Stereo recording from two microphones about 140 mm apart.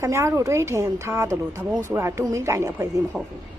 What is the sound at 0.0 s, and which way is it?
A woman's voice, 20° right (ahead or behind).